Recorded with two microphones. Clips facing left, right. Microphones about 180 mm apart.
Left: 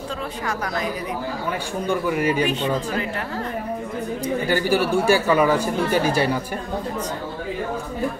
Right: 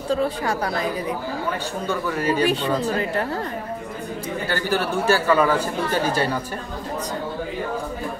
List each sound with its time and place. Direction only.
0.1 s speech: 30° right (ahead or behind)
1.9 s speech: 15° left (ahead or behind)
2.4 s speech: 35° right (ahead or behind)
4.5 s speech: 10° left (ahead or behind)